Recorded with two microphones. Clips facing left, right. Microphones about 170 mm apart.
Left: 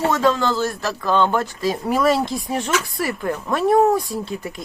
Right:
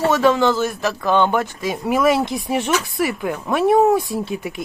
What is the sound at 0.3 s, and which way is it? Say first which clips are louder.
A man's voice: right 3 dB; 20° right (ahead or behind).